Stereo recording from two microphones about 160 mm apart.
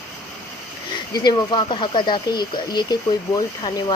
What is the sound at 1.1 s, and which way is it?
Speech, 25° left (ahead or behind).